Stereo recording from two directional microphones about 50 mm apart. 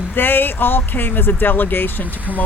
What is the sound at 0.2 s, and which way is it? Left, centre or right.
Speech, left.